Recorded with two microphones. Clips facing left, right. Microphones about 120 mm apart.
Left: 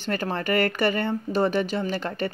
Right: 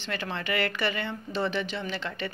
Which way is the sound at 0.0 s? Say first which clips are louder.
Left 6 dB; 45° left (ahead or behind).